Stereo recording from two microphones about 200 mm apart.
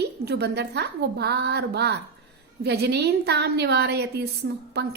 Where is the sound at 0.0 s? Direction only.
55° right (ahead or behind).